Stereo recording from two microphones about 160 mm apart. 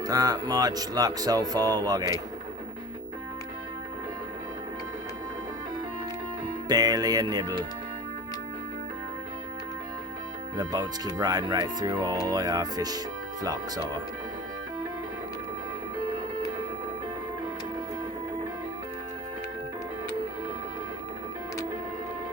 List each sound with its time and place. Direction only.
0.0 s speech: 25° right (ahead or behind)
6.7 s speech: 25° right (ahead or behind)
10.6 s speech: 25° right (ahead or behind)